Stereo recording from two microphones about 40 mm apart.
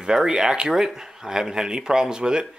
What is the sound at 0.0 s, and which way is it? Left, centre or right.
Speech, centre.